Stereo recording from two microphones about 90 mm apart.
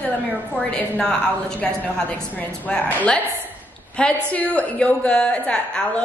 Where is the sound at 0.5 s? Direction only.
15° left (ahead or behind).